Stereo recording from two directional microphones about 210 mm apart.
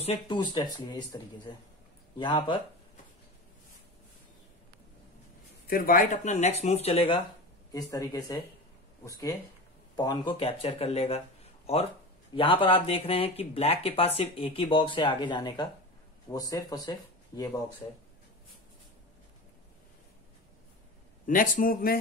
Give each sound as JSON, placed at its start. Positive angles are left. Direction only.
{"t": 0.0, "sound": "speech", "side_deg": 25}
{"t": 5.7, "sound": "speech", "side_deg": 40}
{"t": 7.7, "sound": "speech", "side_deg": 15}
{"t": 12.4, "sound": "speech", "side_deg": 25}
{"t": 21.3, "sound": "speech", "side_deg": 40}